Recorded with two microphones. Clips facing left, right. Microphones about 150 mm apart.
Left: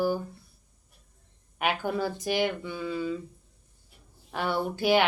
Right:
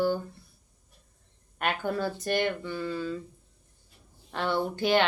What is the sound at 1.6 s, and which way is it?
Speech, 10° left (ahead or behind).